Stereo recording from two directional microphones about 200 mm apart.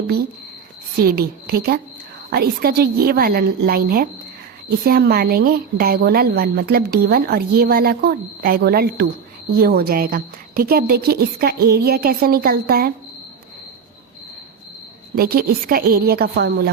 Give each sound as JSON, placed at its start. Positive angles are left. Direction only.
{"t": 0.9, "sound": "a woman's voice", "side_deg": -50}
{"t": 15.1, "sound": "a woman's voice", "side_deg": -50}